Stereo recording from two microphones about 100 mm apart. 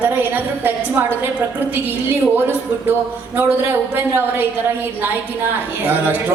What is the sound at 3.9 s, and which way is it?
Speech, 20° right (ahead or behind).